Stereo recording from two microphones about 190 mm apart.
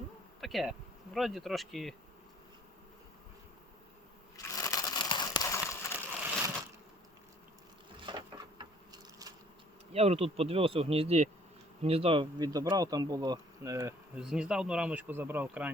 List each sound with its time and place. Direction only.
0.4 s speech: centre (ahead or behind)
4.5 s a sound: 20° left (ahead or behind)
8.1 s a sound: 25° right (ahead or behind)
9.9 s speech: 35° right (ahead or behind)
11.8 s bee: 30° right (ahead or behind); by 13.9 s 15° right (ahead or behind)
14.2 s speech: 5° right (ahead or behind)